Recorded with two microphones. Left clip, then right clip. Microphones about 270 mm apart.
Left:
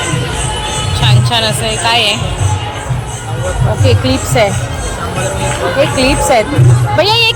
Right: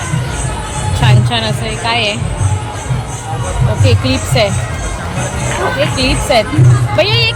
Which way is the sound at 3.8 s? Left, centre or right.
Left.